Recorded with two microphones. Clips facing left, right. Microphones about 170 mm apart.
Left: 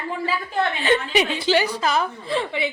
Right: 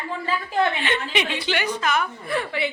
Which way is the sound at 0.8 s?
40° left (ahead or behind).